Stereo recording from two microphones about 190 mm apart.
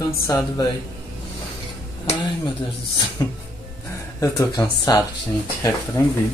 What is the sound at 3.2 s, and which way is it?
Music, 20° left (ahead or behind).